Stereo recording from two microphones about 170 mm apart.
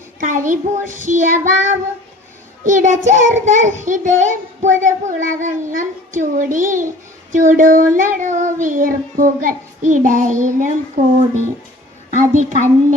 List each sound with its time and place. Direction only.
0.2 s child singing: 50° right (ahead or behind)
12.1 s a woman's voice: 45° right (ahead or behind)